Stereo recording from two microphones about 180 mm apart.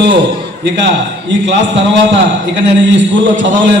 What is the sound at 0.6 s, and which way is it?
A man's voice, 80° right.